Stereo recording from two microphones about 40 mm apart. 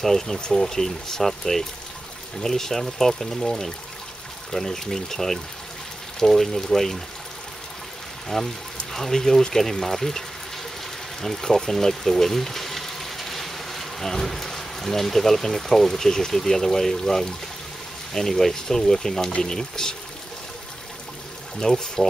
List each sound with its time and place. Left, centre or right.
0.0 s speech: centre
8.3 s speech: centre
21.5 s speech: centre